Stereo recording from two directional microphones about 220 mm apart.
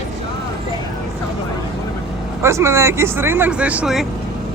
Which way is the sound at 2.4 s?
10° right (ahead or behind).